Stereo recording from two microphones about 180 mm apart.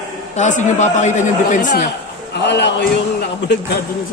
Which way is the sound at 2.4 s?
75° left (ahead or behind).